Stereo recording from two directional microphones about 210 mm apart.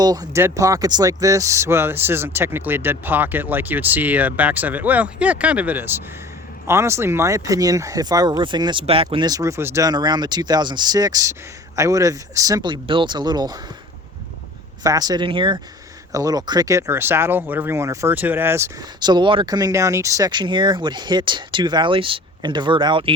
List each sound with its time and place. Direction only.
0.0 s speech: 20° right (ahead or behind)
14.8 s speech: 20° right (ahead or behind)